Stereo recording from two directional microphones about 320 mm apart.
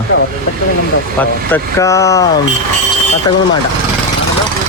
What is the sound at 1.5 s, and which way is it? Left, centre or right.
Speech, centre.